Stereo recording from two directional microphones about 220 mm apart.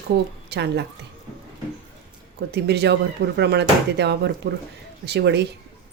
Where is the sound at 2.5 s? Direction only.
50° right (ahead or behind).